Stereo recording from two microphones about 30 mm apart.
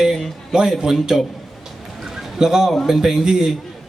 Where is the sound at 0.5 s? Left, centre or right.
Right.